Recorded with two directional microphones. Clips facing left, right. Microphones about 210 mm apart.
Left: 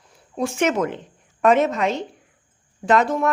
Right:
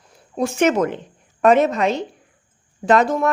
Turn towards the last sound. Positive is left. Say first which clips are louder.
# right 2 dB
turn(degrees=-40)  # may be behind; listen again after turning